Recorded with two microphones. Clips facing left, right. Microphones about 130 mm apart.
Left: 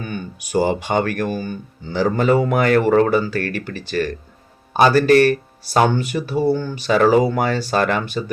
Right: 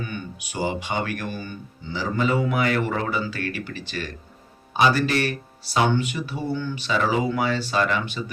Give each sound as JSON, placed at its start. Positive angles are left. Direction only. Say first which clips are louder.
{"t": 0.0, "sound": "speech", "louder": "left 4 dB", "side_deg": 40}